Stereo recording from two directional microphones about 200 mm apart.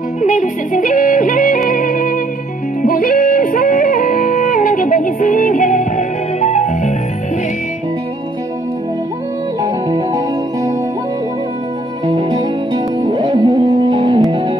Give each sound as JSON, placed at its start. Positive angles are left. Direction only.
{"t": 0.2, "sound": "yodeling", "side_deg": 40}
{"t": 1.7, "sound": "music", "side_deg": 45}
{"t": 9.6, "sound": "music", "side_deg": -20}
{"t": 12.1, "sound": "music", "side_deg": -25}